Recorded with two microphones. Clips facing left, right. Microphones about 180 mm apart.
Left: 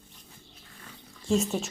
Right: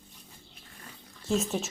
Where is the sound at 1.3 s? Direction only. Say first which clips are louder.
Left 2 dB; centre (ahead or behind).